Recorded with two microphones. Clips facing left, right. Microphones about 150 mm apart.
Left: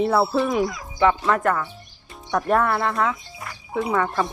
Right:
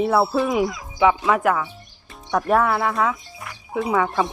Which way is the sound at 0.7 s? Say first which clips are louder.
Right 1 dB; 20° right (ahead or behind).